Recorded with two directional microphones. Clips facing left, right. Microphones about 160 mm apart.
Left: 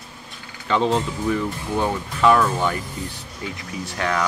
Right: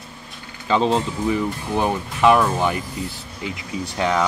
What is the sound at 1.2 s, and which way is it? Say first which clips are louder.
Speech: right 1 dB; 15° right (ahead or behind).